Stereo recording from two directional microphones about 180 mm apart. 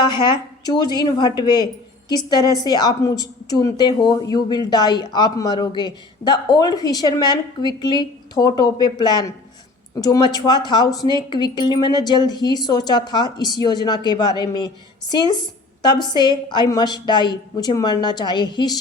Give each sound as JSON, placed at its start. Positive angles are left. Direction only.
{"t": 0.0, "sound": "a woman's voice", "side_deg": 25}